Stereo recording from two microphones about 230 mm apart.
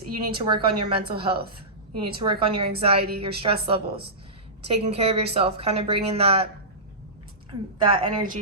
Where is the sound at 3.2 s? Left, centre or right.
Right.